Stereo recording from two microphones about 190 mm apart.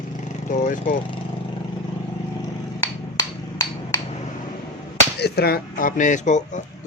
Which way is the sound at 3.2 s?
20° left (ahead or behind).